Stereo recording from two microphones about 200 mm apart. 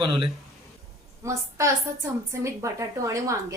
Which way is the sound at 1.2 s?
15° right (ahead or behind).